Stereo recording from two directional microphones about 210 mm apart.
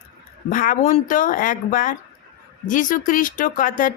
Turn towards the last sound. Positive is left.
turn(degrees=40)  # may be behind; listen again after turning